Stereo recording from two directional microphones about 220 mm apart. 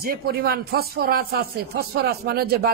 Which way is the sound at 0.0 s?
45° right (ahead or behind).